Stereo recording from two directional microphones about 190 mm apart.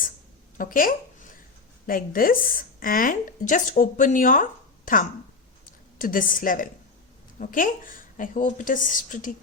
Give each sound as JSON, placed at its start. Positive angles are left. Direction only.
{"t": 0.5, "sound": "a sound", "side_deg": 45}
{"t": 1.9, "sound": "a woman's voice", "side_deg": 50}
{"t": 6.0, "sound": "a woman's voice", "side_deg": 45}